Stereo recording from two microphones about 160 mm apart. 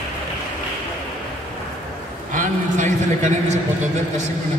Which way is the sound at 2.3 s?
50° right (ahead or behind).